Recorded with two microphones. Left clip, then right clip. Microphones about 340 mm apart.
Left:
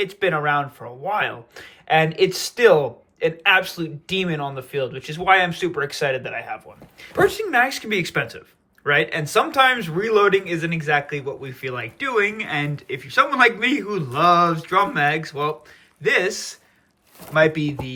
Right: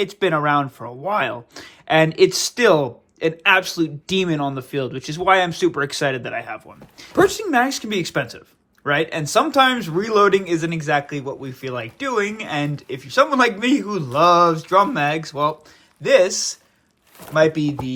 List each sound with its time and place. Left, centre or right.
0.0 s a man's voice: centre